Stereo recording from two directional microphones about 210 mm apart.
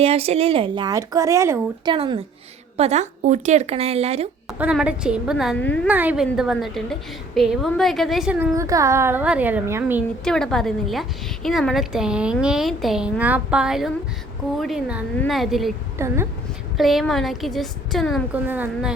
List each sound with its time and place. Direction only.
0.0 s speech: 30° right (ahead or behind)
4.5 s a woman's voice: 5° right (ahead or behind)
5.9 s a woman's voice: 10° right (ahead or behind)
10.2 s a woman's voice: centre (ahead or behind)
16.0 s a woman's voice: 10° right (ahead or behind)
16.7 s a woman's voice: centre (ahead or behind)